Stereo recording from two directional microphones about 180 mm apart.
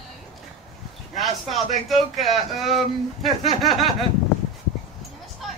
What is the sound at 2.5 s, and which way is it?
Speech, centre (ahead or behind).